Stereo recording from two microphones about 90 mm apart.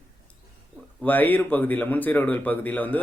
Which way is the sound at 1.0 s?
20° left (ahead or behind).